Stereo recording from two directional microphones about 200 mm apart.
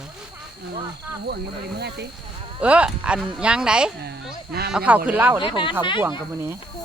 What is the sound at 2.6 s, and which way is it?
Speech, 5° right (ahead or behind).